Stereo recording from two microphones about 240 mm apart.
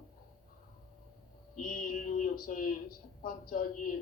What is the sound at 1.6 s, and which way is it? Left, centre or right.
Speech, left.